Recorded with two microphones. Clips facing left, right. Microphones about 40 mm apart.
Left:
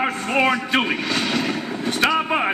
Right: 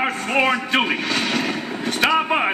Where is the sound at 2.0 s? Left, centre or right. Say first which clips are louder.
Right 1 dB; centre.